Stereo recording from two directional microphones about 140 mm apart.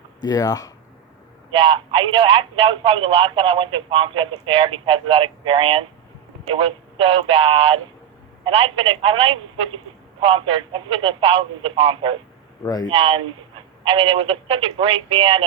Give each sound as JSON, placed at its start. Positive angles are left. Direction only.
{"t": 0.2, "sound": "speech", "side_deg": 25}
{"t": 1.5, "sound": "speech", "side_deg": -40}
{"t": 12.6, "sound": "speech", "side_deg": 25}
{"t": 12.9, "sound": "speech", "side_deg": -40}